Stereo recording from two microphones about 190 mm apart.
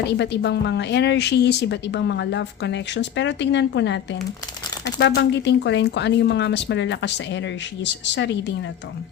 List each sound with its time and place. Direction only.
0.0 s a woman's voice: 60° left (ahead or behind)